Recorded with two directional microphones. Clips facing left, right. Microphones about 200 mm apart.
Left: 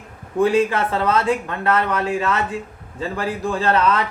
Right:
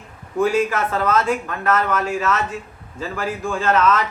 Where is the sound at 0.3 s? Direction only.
30° left (ahead or behind).